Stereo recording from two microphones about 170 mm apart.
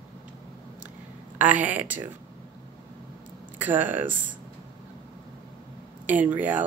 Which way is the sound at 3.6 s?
10° right (ahead or behind).